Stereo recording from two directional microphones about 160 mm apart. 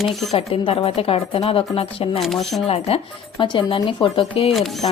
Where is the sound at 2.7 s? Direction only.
35° left (ahead or behind).